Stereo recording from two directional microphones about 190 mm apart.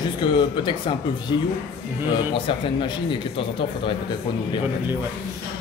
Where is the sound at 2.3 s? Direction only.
25° left (ahead or behind).